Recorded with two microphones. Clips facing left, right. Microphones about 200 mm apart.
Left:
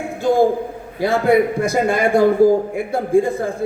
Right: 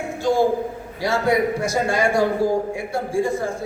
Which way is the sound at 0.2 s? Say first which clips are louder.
Left 4 dB; 55° left (ahead or behind).